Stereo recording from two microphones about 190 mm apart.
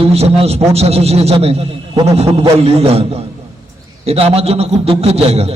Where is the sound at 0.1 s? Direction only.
35° right (ahead or behind).